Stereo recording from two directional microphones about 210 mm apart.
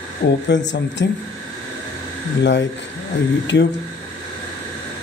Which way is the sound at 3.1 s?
60° left (ahead or behind).